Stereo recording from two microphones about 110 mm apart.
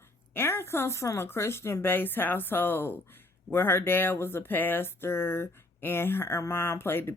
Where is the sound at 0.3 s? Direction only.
20° left (ahead or behind).